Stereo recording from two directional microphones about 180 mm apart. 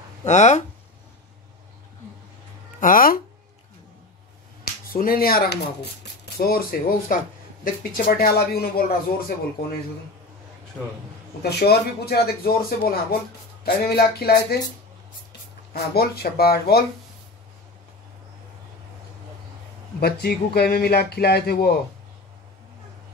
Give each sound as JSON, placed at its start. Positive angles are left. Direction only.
{"t": 0.2, "sound": "speech", "side_deg": 40}
{"t": 2.8, "sound": "speech", "side_deg": 50}
{"t": 4.9, "sound": "a man's voice", "side_deg": 55}
{"t": 11.4, "sound": "a man's voice", "side_deg": 65}
{"t": 15.7, "sound": "a man's voice", "side_deg": 60}
{"t": 20.0, "sound": "a man's voice", "side_deg": 60}